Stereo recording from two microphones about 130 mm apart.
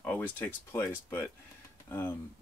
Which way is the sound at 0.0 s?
10° left (ahead or behind).